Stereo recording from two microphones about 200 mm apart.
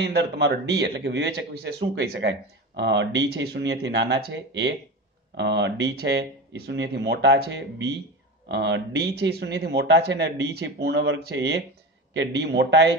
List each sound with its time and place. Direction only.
0.0 s speech: 60° right (ahead or behind)